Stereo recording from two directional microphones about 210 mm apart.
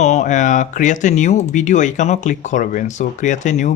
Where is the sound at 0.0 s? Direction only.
35° left (ahead or behind).